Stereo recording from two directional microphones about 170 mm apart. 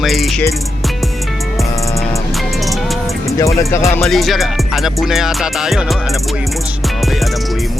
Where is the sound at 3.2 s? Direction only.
20° left (ahead or behind).